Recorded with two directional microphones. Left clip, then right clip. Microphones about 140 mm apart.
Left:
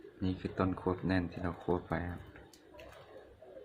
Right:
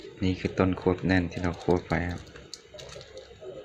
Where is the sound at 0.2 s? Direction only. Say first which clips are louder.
Right 9 dB; 15° right (ahead or behind).